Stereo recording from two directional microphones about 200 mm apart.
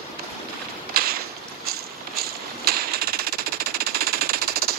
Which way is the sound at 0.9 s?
50° right (ahead or behind).